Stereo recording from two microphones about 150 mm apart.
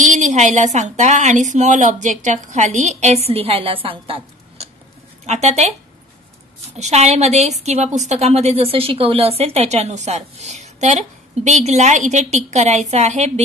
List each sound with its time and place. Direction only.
0.0 s a woman's voice: 55° right (ahead or behind); by 4.6 s 35° right (ahead or behind)
5.2 s a woman's voice: 45° right (ahead or behind)
6.8 s a woman's voice: 45° right (ahead or behind)